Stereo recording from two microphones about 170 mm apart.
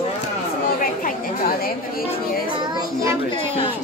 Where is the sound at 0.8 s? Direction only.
55° left (ahead or behind).